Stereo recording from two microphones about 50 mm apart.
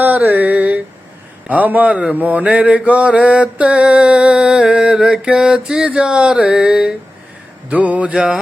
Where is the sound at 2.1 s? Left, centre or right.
Right.